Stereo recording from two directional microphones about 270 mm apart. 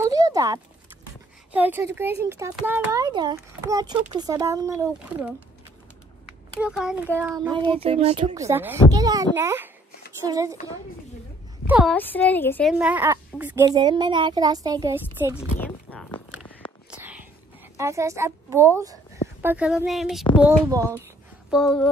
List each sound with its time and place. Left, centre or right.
0.0 s a sound: centre
1.5 s a child's voice: centre
6.6 s a child's voice: centre; by 8.4 s right
8.4 s a child's voice: centre
11.6 s speech: centre
12.7 s a child's voice: centre
15.6 s a sound: centre
17.7 s a child's voice: centre